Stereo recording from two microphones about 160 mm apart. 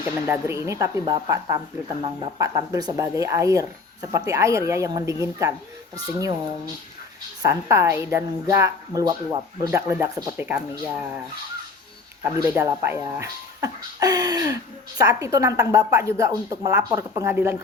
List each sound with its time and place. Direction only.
0.0 s speech: 15° right (ahead or behind)
7.4 s a woman's voice: 20° right (ahead or behind)
12.2 s speech: 20° right (ahead or behind)